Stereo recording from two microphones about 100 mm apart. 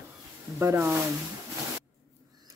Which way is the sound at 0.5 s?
25° right (ahead or behind).